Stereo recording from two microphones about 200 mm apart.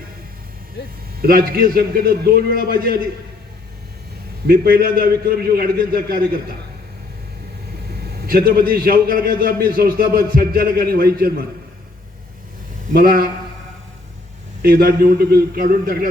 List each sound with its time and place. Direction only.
1.2 s a man's voice: 50° right (ahead or behind)
4.4 s a man's voice: 45° right (ahead or behind)
8.3 s a man's voice: 45° right (ahead or behind)
12.9 s a man's voice: 50° right (ahead or behind)
14.6 s a man's voice: 50° right (ahead or behind)